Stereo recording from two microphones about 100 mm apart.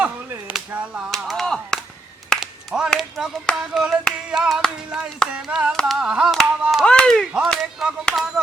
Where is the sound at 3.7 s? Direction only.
5° right (ahead or behind).